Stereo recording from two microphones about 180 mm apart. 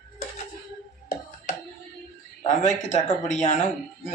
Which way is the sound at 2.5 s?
40° left (ahead or behind).